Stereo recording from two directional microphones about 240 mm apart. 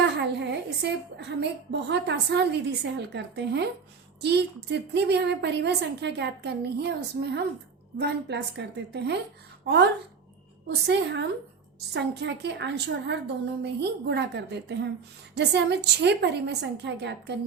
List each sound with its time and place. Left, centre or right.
0.0 s a woman's voice: right
10.8 s a woman's voice: right